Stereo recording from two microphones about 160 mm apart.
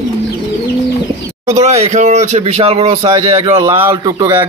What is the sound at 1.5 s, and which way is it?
Speech, 45° right (ahead or behind).